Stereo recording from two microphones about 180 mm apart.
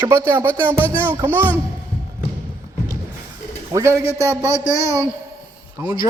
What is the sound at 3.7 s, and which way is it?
Speech, 15° right (ahead or behind).